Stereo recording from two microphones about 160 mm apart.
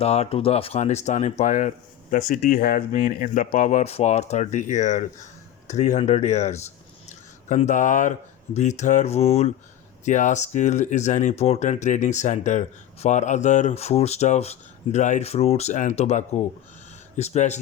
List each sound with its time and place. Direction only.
0.0 s speech: 40° left (ahead or behind)